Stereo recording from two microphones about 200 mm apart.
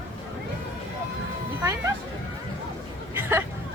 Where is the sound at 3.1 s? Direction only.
10° right (ahead or behind).